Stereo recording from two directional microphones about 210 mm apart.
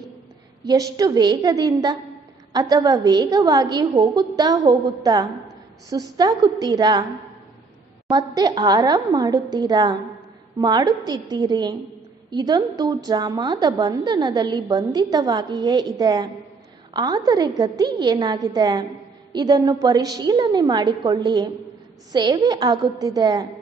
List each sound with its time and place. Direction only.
0.7 s a woman's voice: 15° right (ahead or behind)
8.1 s a woman's voice: 20° right (ahead or behind)